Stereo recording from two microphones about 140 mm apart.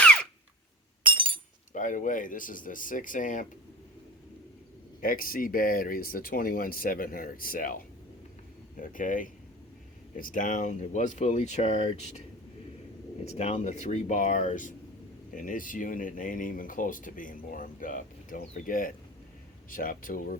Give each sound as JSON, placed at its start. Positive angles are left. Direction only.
{"t": 0.0, "sound": "a sound", "side_deg": 10}
{"t": 1.0, "sound": "chink", "side_deg": -40}
{"t": 1.7, "sound": "speech", "side_deg": 65}
{"t": 4.9, "sound": "speech", "side_deg": 85}
{"t": 8.7, "sound": "speech", "side_deg": 75}
{"t": 13.3, "sound": "speech", "side_deg": 50}
{"t": 19.7, "sound": "speech", "side_deg": 90}